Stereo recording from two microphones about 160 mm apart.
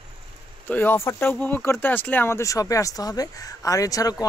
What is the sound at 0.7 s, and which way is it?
Speech, 15° left (ahead or behind).